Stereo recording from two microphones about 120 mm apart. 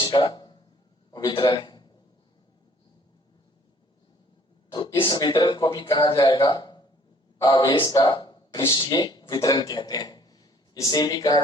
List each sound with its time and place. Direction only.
0.0 s a sound: 40° left (ahead or behind)
1.1 s a man's voice: 45° left (ahead or behind)
4.9 s a man's voice: 40° left (ahead or behind)